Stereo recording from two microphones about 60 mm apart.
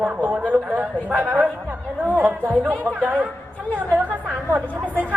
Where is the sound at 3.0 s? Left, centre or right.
Right.